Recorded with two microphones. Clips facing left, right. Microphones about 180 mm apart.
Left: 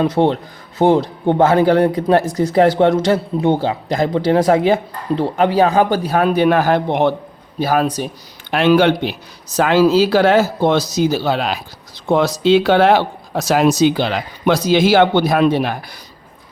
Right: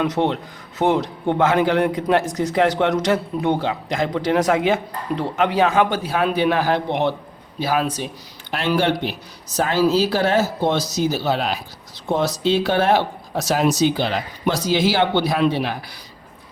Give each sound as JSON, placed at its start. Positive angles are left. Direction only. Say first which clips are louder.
{"t": 0.0, "sound": "speech", "louder": "left 5 dB", "side_deg": 30}
{"t": 7.6, "sound": "a man's voice", "louder": "left 5 dB", "side_deg": 45}
{"t": 8.4, "sound": "speech", "louder": "left 8 dB", "side_deg": 60}
{"t": 9.6, "sound": "speech", "louder": "left 6 dB", "side_deg": 90}
{"t": 12.0, "sound": "speech", "louder": "left 6 dB", "side_deg": 80}